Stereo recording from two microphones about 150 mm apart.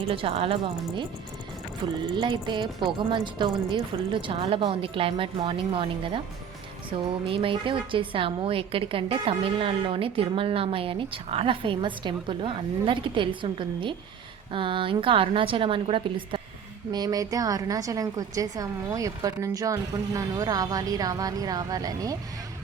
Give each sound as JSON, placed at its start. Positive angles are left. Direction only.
{"t": 0.1, "sound": "a woman's voice", "side_deg": -40}
{"t": 6.9, "sound": "a woman's voice", "side_deg": -35}